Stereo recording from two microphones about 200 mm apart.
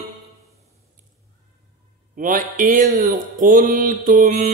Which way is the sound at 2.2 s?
45° right (ahead or behind).